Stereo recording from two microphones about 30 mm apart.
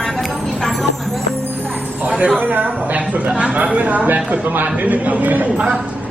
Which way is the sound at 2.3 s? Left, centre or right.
Right.